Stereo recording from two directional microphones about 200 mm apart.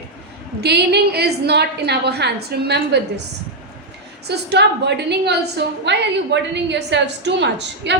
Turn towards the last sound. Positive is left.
turn(degrees=-60)  # may be behind; listen again after turning